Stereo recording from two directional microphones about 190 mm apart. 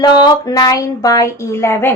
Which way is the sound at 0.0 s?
20° left (ahead or behind).